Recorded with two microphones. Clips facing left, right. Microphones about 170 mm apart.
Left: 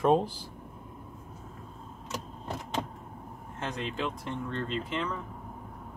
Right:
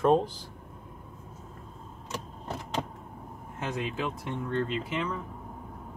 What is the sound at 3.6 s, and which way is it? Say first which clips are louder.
Speech: right 1 dB; 10° right (ahead or behind).